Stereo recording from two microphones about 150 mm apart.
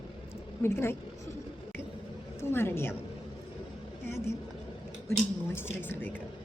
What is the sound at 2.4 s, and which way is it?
Speech, 15° left (ahead or behind).